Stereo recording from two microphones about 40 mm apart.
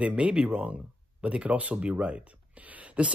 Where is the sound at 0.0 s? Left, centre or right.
Right.